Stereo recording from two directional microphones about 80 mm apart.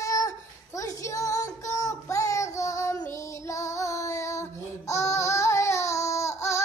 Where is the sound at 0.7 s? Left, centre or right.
Left.